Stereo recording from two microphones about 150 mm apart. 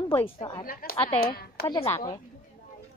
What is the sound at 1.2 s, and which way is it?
Speech, 90° left.